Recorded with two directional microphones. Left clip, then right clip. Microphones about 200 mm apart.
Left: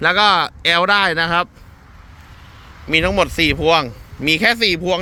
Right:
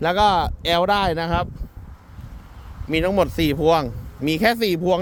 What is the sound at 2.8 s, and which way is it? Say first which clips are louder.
Speech: left 4 dB; 20° right (ahead or behind).